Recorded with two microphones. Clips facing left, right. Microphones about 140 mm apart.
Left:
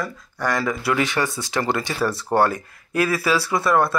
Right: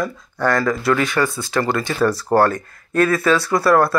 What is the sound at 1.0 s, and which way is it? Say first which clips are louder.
Speech: right 3 dB; 20° left (ahead or behind).